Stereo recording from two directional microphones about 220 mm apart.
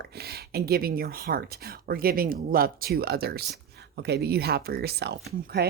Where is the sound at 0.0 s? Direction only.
45° right (ahead or behind).